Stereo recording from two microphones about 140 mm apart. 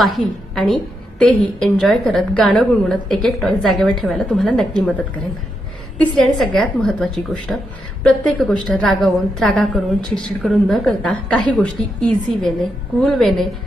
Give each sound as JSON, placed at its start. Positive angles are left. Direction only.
{"t": 0.0, "sound": "a woman's voice", "side_deg": 0}